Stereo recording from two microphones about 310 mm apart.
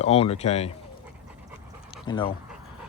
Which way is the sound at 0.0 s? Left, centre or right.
Centre.